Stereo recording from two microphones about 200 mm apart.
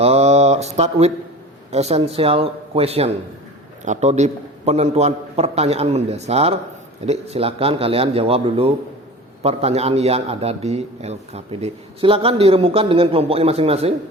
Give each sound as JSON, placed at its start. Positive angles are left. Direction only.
{"t": 0.0, "sound": "a man's voice", "side_deg": -30}